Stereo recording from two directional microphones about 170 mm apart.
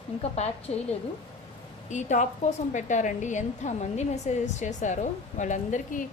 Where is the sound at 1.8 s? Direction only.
45° left (ahead or behind).